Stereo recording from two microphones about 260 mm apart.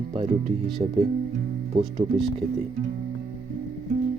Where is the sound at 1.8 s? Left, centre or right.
Right.